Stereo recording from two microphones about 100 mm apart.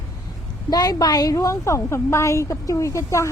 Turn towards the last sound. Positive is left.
turn(degrees=30)  # may be behind; listen again after turning